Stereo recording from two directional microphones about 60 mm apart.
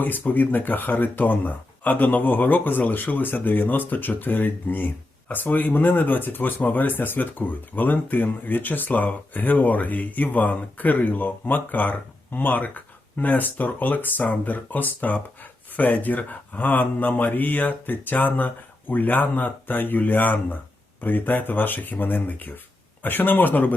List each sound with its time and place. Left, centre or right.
0.0 s speech: left